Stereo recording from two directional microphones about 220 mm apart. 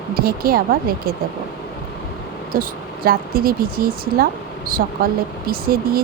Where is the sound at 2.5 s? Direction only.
40° right (ahead or behind).